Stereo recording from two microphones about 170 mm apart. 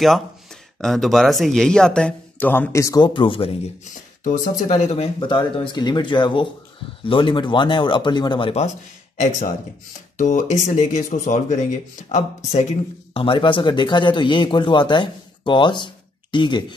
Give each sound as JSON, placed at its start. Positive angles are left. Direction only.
{"t": 0.7, "sound": "a man's voice", "side_deg": 5}
{"t": 10.1, "sound": "speech", "side_deg": 50}
{"t": 13.1, "sound": "a man's voice", "side_deg": 30}